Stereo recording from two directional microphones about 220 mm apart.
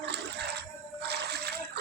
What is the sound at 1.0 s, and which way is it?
Splash, 50° right (ahead or behind).